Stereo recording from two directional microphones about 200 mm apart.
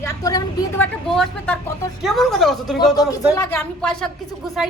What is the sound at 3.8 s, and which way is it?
Speech, 5° left (ahead or behind).